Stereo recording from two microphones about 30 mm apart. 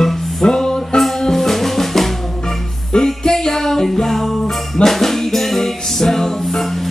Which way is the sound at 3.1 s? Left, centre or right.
Centre.